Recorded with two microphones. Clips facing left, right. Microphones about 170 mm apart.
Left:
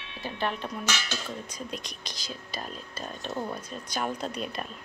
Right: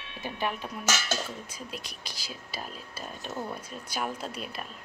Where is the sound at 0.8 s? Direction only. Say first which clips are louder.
Right 6 dB; 45° right (ahead or behind).